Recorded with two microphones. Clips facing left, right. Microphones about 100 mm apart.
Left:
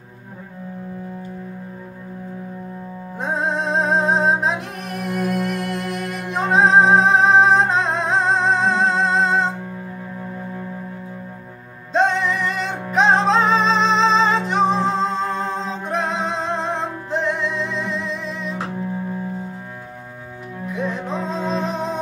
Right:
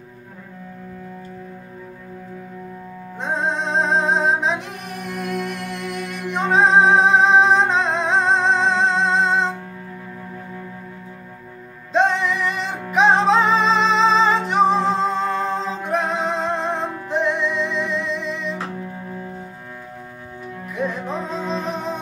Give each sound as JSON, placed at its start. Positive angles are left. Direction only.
{"t": 3.2, "sound": "music", "side_deg": 5}
{"t": 11.9, "sound": "music", "side_deg": 0}
{"t": 20.7, "sound": "music", "side_deg": 0}